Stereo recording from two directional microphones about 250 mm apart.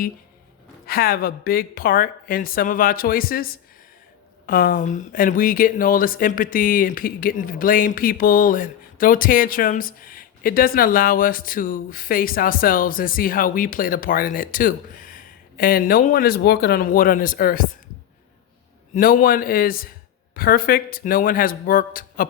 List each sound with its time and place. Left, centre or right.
0.9 s speech: left
18.9 s speech: left